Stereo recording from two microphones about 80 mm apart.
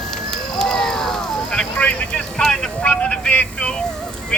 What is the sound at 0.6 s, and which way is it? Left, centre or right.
Speech, centre.